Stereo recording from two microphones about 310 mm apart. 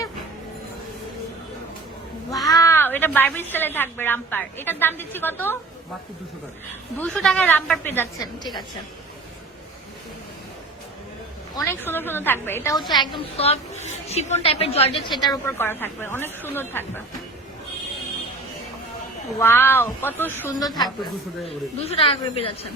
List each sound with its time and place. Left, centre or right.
2.5 s a woman's voice: centre
7.0 s a woman's voice: centre
11.5 s a woman's voice: centre
19.3 s a woman's voice: centre